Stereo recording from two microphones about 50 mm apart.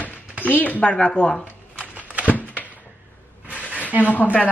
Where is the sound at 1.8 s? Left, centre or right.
Right.